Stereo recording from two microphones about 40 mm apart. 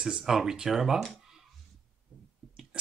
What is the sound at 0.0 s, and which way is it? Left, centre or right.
Speech, centre.